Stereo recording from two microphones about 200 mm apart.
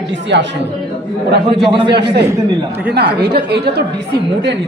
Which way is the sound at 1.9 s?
55° right (ahead or behind).